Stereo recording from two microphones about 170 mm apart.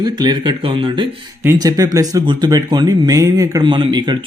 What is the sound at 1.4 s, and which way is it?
Speech, 15° right (ahead or behind).